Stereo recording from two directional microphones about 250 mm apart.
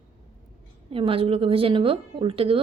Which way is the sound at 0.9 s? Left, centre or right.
Right.